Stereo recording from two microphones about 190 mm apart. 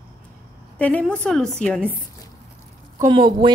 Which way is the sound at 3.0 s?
25° right (ahead or behind).